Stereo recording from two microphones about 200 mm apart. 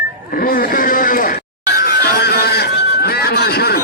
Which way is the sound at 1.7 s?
50° left (ahead or behind).